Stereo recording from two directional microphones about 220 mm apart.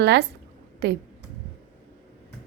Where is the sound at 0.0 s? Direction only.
50° right (ahead or behind).